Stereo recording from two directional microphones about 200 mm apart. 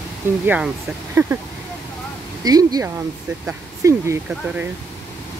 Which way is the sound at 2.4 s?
20° right (ahead or behind).